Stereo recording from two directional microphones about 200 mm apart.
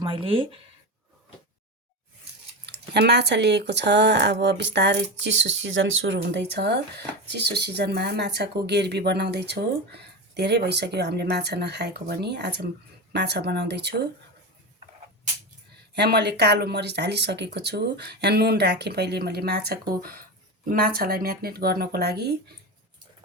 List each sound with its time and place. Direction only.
0.0 s speech: 25° right (ahead or behind)
2.6 s speech: 55° right (ahead or behind)
16.0 s speech: 55° right (ahead or behind)